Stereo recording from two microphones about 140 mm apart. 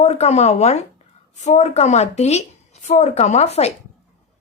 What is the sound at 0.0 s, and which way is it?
Speech, 50° left (ahead or behind).